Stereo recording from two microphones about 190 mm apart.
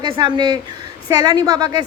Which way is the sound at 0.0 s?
20° right (ahead or behind).